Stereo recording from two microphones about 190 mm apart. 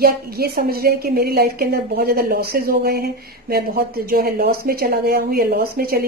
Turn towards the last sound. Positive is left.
turn(degrees=-50)  # may be behind; listen again after turning